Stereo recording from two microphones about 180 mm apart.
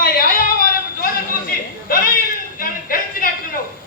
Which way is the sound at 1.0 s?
55° left (ahead or behind).